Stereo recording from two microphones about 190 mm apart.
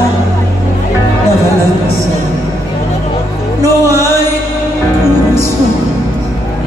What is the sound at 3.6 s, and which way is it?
Music, 15° right (ahead or behind).